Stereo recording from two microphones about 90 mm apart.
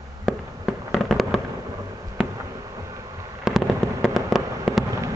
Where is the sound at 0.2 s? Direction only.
Centre (ahead or behind).